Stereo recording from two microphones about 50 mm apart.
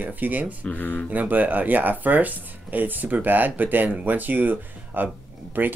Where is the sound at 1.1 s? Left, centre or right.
Right.